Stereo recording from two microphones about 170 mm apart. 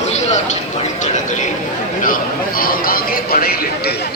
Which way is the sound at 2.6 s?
55° left (ahead or behind).